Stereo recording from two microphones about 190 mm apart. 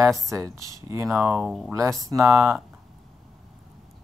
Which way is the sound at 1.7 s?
15° right (ahead or behind).